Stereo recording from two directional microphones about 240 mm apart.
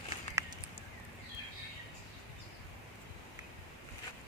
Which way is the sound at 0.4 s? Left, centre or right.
Centre.